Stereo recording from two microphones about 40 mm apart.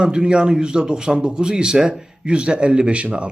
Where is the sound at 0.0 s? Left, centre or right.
Right.